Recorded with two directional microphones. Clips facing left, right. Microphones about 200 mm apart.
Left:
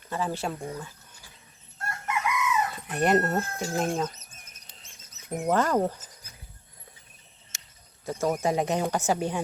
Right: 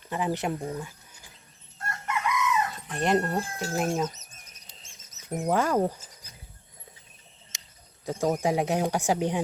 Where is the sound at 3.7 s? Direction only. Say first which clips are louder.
Even; 5° right (ahead or behind).